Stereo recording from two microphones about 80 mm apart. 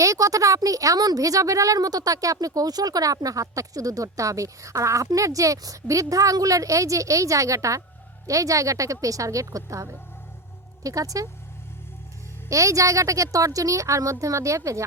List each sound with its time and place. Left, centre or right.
0.0 s a woman's voice: right
12.5 s a woman's voice: right